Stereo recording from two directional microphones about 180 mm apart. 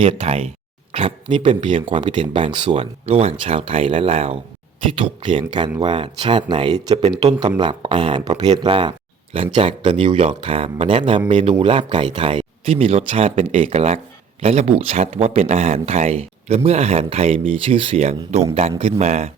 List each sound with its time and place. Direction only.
0.0 s speech: 30° right (ahead or behind)